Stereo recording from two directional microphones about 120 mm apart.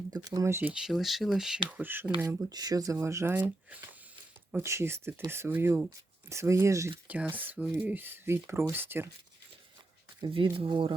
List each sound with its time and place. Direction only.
0.1 s speech: 30° right (ahead or behind)
0.7 s speech: 5° right (ahead or behind)
1.7 s speech: 15° right (ahead or behind)
2.2 s speech: 35° right (ahead or behind)
4.5 s speech: 20° right (ahead or behind)
7.1 s speech: 15° right (ahead or behind)
10.2 s speech: 40° right (ahead or behind)